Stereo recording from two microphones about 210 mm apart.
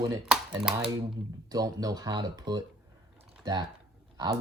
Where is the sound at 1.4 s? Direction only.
20° right (ahead or behind).